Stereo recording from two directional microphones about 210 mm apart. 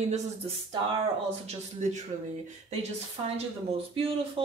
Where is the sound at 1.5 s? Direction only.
35° right (ahead or behind).